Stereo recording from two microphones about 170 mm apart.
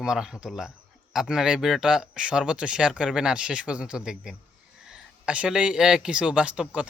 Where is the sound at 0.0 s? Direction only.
5° right (ahead or behind).